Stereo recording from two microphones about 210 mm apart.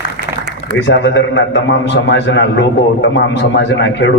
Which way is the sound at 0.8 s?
60° left (ahead or behind).